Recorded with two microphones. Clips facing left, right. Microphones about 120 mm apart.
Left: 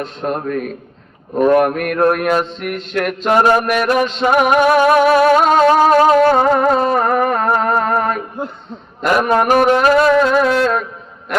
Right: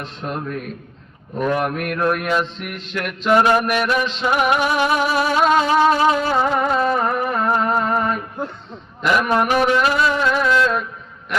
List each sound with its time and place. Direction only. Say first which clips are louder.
0.0 s music: left 6 dB; 50° left (ahead or behind)